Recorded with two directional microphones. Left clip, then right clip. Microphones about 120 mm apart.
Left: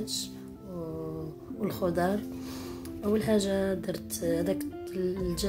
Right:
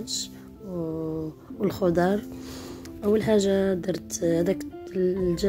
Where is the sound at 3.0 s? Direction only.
25° right (ahead or behind).